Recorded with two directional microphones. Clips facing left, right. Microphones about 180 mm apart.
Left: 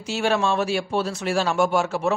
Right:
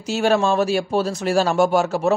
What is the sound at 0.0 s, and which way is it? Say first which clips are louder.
Speech: right 4 dB; 40° right (ahead or behind).